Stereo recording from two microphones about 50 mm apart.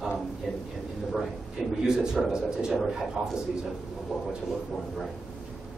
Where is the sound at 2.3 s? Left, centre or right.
Centre.